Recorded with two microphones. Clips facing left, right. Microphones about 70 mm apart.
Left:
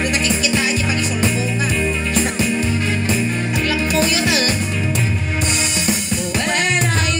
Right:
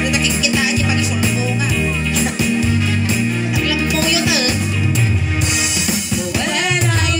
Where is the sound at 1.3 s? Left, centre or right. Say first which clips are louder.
Right 1 dB; left.